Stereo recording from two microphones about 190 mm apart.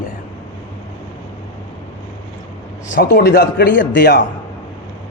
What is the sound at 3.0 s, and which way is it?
A man's voice, 60° left (ahead or behind).